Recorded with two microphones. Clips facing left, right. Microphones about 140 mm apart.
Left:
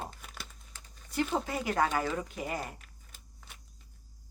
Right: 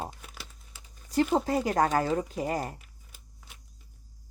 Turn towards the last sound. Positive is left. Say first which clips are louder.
# even
turn(degrees=-10)  # may be behind; listen again after turning